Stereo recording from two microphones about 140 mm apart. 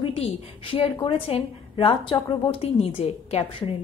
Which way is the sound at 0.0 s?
40° left (ahead or behind).